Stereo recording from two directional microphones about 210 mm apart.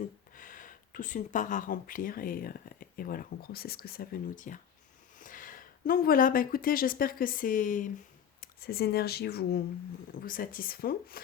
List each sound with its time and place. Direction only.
0.3 s speech: 40° left (ahead or behind)